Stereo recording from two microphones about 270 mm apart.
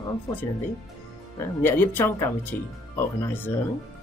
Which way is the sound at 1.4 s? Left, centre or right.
Centre.